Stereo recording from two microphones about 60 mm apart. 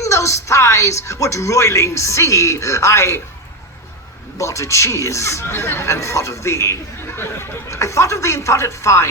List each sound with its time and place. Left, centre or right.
0.0 s a woman's voice: left
4.4 s a woman's voice: left
7.1 s speech: left